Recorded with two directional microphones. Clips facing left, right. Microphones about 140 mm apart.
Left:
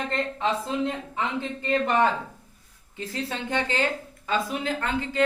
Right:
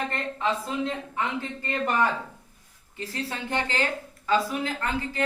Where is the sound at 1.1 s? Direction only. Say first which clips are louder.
Left 1 dB; 20° left (ahead or behind).